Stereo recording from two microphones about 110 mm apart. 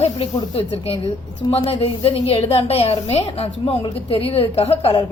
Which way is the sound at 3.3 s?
60° left (ahead or behind).